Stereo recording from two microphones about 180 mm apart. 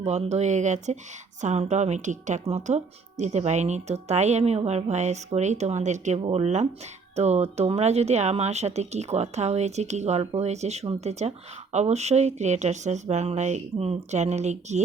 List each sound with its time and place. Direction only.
0.0 s speech: 40° right (ahead or behind)